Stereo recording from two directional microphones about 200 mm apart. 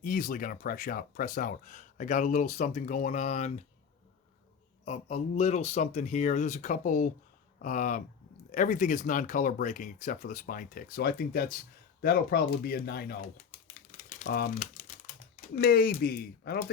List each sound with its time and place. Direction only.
0.0 s speech: 45° left (ahead or behind)
4.9 s speech: 35° left (ahead or behind); by 13.1 s 50° left (ahead or behind)
13.9 s typing: 40° left (ahead or behind)
15.5 s speech: 50° left (ahead or behind)